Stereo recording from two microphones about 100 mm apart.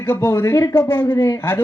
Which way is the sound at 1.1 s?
35° left (ahead or behind).